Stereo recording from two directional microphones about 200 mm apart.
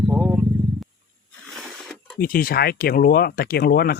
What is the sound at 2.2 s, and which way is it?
Speech, 45° left (ahead or behind).